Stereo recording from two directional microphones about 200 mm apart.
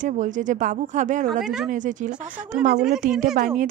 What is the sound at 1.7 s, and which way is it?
Speech, 40° right (ahead or behind).